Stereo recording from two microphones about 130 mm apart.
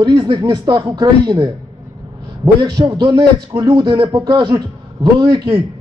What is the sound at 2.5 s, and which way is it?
Speech, 35° right (ahead or behind).